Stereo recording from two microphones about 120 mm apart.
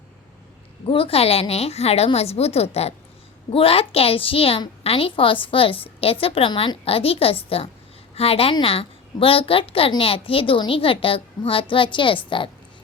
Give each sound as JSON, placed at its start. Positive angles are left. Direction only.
{"t": 0.9, "sound": "a woman's voice", "side_deg": 50}